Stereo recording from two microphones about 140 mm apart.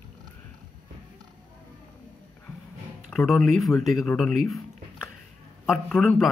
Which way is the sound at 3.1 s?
Centre (ahead or behind).